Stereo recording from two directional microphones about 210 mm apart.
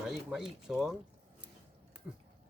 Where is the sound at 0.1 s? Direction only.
Centre (ahead or behind).